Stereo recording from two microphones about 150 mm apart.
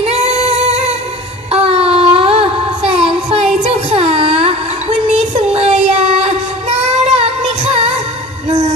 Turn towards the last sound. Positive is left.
turn(degrees=-40)  # may be behind; listen again after turning